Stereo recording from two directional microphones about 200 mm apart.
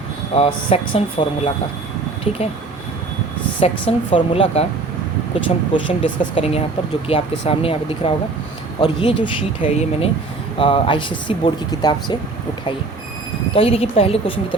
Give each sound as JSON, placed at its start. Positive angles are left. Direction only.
{"t": 0.3, "sound": "speech", "side_deg": 30}
{"t": 3.6, "sound": "speech", "side_deg": 25}
{"t": 5.7, "sound": "speech", "side_deg": 25}
{"t": 13.5, "sound": "speech", "side_deg": 30}